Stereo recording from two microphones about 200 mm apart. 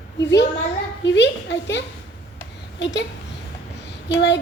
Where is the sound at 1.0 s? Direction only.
60° left (ahead or behind).